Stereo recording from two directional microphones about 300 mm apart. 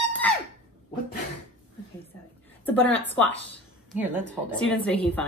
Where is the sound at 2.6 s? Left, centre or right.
Centre.